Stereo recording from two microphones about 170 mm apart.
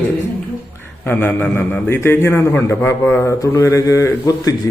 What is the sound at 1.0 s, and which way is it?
A man's voice, 10° left (ahead or behind).